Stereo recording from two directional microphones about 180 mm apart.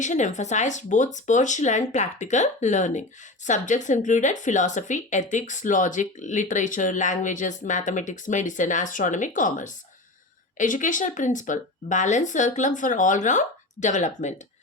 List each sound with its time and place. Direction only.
0.0 s speech: 40° left (ahead or behind)